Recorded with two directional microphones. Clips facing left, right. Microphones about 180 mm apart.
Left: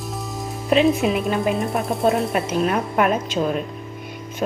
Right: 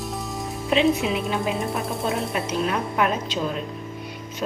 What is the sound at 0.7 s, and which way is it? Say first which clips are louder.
Speech: left 3 dB; 50° left (ahead or behind).